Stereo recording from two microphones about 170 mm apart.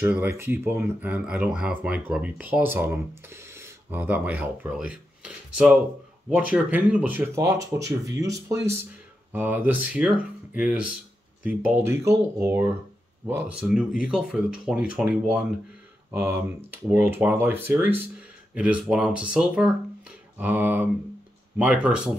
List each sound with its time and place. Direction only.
0.0 s speech: 15° right (ahead or behind)
13.3 s speech: 5° right (ahead or behind)